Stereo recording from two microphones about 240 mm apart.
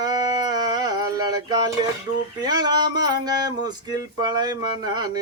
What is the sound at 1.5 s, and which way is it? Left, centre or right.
Speech, centre.